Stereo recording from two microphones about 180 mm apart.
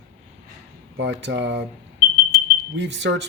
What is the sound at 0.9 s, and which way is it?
Speech, 75° right (ahead or behind).